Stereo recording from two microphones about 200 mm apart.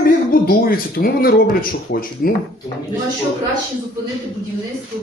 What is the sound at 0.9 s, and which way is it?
A man's voice, 50° left (ahead or behind).